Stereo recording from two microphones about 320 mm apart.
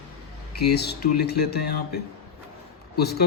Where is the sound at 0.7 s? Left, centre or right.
Left.